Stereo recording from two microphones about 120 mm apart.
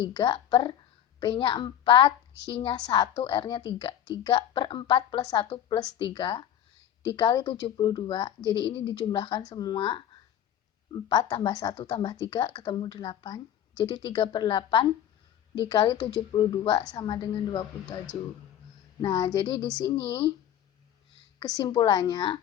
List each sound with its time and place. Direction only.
0.0 s a child's voice: 40° left (ahead or behind)
11.1 s speech: 35° left (ahead or behind)
11.7 s speech: 50° left (ahead or behind)
19.0 s speech: 40° left (ahead or behind)
21.3 s speech: 35° left (ahead or behind)